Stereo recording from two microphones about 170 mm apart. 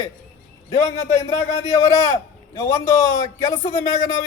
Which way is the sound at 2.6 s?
20° left (ahead or behind).